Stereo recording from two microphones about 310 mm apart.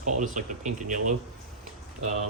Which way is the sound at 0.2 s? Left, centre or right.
Right.